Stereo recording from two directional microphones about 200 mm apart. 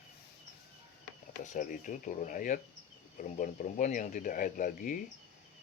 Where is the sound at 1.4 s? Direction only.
40° left (ahead or behind).